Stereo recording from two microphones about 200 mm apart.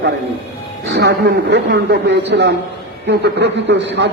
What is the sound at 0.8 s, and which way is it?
A man's voice, 55° right (ahead or behind).